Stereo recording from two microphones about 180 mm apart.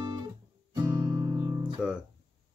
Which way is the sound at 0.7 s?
20° right (ahead or behind).